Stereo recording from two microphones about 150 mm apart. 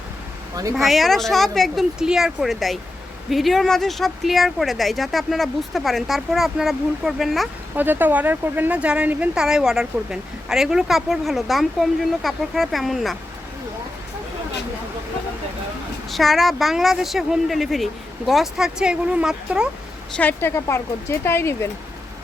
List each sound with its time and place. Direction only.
0.8 s speech: centre (ahead or behind)
7.8 s speech: 10° right (ahead or behind)
16.0 s speech: centre (ahead or behind)
20.1 s speech: 15° left (ahead or behind)